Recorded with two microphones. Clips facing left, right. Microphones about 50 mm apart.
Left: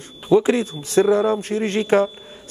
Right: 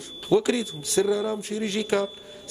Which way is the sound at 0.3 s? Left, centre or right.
Left.